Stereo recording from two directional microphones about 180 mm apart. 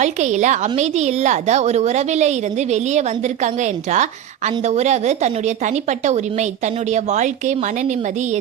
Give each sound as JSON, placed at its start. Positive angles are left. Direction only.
{"t": 0.0, "sound": "a woman's voice", "side_deg": -40}